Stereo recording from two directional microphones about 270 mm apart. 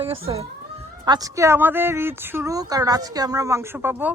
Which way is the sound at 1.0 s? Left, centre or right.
Centre.